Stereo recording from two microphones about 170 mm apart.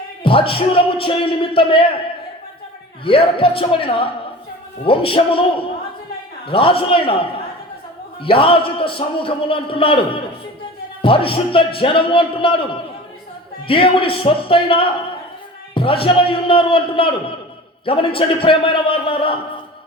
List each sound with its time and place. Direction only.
0.2 s a man's voice: 30° left (ahead or behind)
3.0 s a man's voice: 30° left (ahead or behind)
11.0 s a man's voice: 30° left (ahead or behind)
13.7 s a man's voice: 30° left (ahead or behind)